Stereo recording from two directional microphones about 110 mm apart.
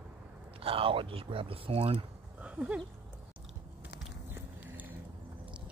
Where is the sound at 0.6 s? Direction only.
55° right (ahead or behind).